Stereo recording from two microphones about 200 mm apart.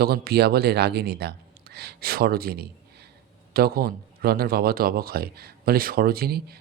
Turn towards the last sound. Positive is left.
turn(degrees=-50)  # may be behind; listen again after turning